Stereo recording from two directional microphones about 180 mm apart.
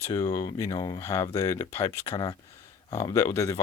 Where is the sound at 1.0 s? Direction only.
15° left (ahead or behind).